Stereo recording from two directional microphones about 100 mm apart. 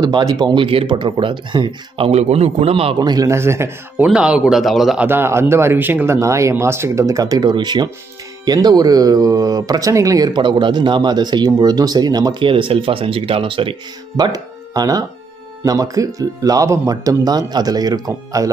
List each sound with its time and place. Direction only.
0.0 s speech: 40° right (ahead or behind)
0.7 s speech: 60° right (ahead or behind)
2.0 s a man's voice: 90° right; by 3.0 s 70° right (ahead or behind)
3.0 s speech: 40° right (ahead or behind)
3.3 s speech: 25° right (ahead or behind)
4.0 s speech: 10° right (ahead or behind)
5.0 s speech: 25° right (ahead or behind)
6.1 s speech: 30° right (ahead or behind)
12.4 s speech: 60° right (ahead or behind)
14.1 s speech: 40° right (ahead or behind)